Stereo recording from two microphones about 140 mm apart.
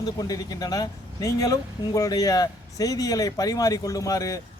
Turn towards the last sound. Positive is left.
turn(degrees=25)  # may be behind; listen again after turning